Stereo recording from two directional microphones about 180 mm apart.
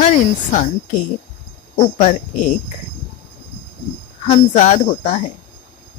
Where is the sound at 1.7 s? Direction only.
40° left (ahead or behind).